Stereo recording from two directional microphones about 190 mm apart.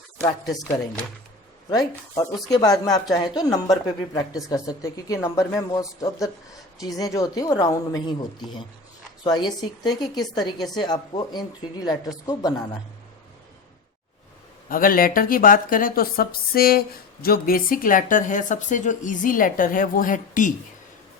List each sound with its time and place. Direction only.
1.7 s a woman's voice: 20° left (ahead or behind)
14.7 s speech: 50° left (ahead or behind)